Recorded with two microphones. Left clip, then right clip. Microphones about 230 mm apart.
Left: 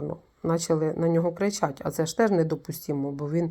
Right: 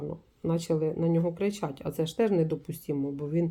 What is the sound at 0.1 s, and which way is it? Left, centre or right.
Speech, left.